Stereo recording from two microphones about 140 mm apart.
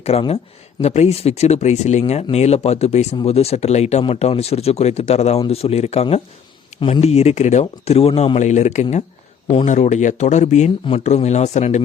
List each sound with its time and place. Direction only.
0.0 s speech: 45° left (ahead or behind)
6.7 s speech: 35° left (ahead or behind)
7.0 s speech: 50° left (ahead or behind)